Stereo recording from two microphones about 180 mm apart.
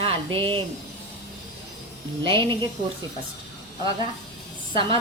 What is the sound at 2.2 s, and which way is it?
Speech, 30° right (ahead or behind).